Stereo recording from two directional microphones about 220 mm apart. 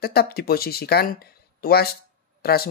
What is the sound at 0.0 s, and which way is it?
Speech, 45° left (ahead or behind).